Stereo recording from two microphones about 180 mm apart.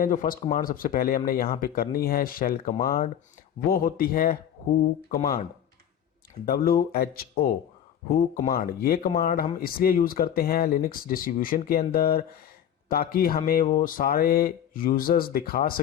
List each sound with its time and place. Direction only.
0.0 s speech: 50° left (ahead or behind)